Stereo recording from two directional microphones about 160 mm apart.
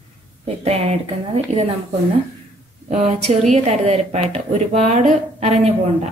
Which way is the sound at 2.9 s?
45° right (ahead or behind).